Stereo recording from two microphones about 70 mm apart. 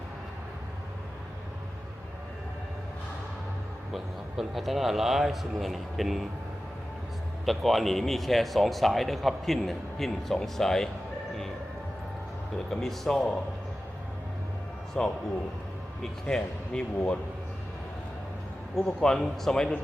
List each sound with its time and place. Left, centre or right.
3.9 s speech: centre
7.4 s speech: centre
12.5 s speech: centre
15.0 s speech: centre
16.2 s speech: centre
18.8 s speech: centre